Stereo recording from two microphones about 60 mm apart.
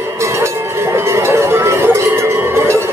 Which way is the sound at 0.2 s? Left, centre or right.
Right.